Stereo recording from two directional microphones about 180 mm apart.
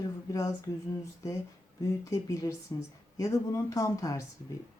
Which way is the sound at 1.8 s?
20° left (ahead or behind).